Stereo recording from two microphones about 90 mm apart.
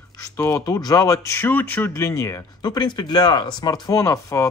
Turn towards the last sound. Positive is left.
turn(degrees=35)  # may be behind; listen again after turning